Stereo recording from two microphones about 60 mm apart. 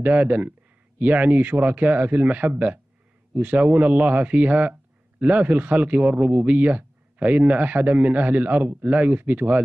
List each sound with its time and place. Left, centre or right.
0.0 s speech: right